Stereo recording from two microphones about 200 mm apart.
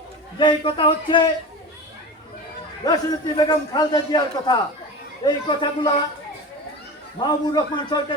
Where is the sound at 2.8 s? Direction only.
20° left (ahead or behind).